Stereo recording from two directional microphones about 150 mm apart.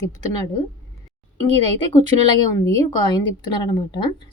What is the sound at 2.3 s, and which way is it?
A woman's voice, 25° left (ahead or behind).